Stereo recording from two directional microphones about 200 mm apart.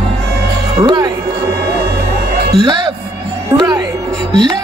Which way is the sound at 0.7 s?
25° right (ahead or behind).